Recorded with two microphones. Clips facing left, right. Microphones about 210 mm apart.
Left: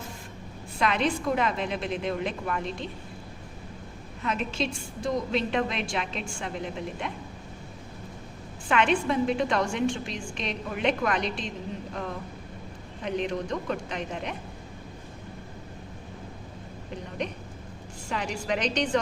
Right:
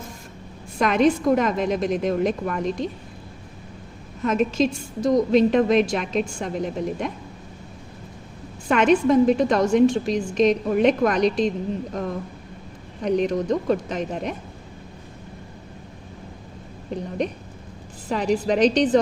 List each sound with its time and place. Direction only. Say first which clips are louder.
0.8 s a woman's voice: right 8 dB; 45° right (ahead or behind)
4.2 s a woman's voice: right 9 dB; 45° right (ahead or behind)
8.6 s a woman's voice: right 7 dB; 40° right (ahead or behind)
13.0 s a woman's voice: right 8 dB; 40° right (ahead or behind)
18.1 s a woman's voice: right 9 dB; 35° right (ahead or behind)